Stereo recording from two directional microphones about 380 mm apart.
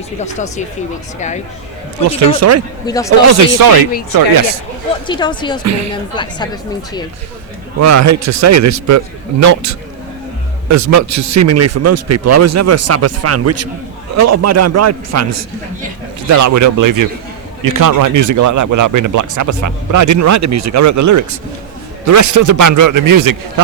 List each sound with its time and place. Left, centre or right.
0.2 s speech: centre
2.4 s a man's voice: right
2.8 s speech: centre
3.3 s speech: right
5.0 s speech: centre
5.6 s speech: right
5.9 s speech: centre
7.8 s speech: right
10.7 s a man's voice: right